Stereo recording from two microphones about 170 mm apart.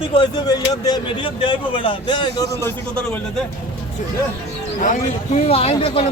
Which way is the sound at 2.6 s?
10° left (ahead or behind).